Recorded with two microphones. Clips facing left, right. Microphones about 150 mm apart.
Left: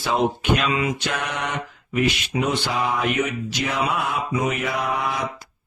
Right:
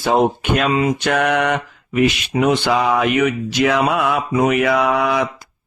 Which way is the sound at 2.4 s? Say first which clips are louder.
Right 8 dB; 80° right.